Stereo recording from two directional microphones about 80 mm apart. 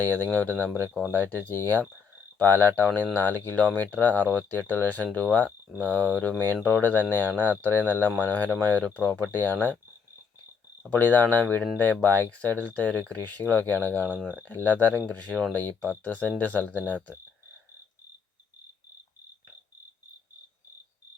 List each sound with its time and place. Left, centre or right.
0.0 s speech: left
10.9 s speech: left